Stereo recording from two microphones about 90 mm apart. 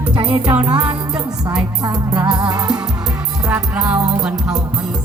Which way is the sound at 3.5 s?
20° right (ahead or behind).